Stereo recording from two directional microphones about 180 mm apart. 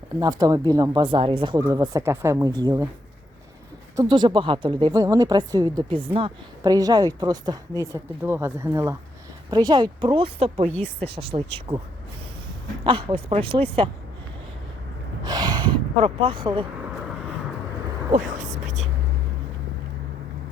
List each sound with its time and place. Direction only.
0.2 s speech: 20° right (ahead or behind)
1.5 s speech: 20° right (ahead or behind)
3.9 s speech: 25° right (ahead or behind)
12.8 s speech: 25° right (ahead or behind)
15.3 s speech: 20° right (ahead or behind)